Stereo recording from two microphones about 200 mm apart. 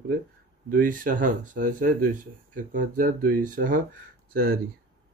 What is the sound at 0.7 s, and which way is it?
Speech, 45° right (ahead or behind).